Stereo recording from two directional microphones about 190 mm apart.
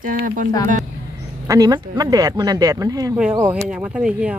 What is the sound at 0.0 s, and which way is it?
Speech, 45° right (ahead or behind).